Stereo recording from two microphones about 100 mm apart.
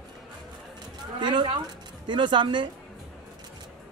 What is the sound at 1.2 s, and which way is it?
A man's voice, 50° right (ahead or behind).